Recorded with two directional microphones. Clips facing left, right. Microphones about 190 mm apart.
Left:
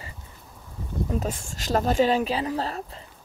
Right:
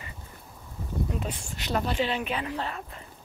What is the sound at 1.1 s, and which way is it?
Speech, 45° left (ahead or behind).